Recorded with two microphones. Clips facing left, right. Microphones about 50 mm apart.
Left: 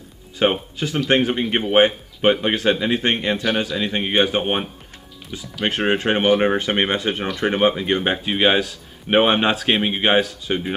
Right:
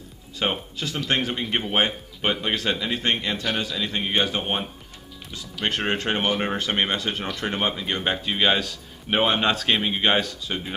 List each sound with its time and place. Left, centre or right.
0.4 s speech: left
3.3 s speech: centre
3.7 s speech: left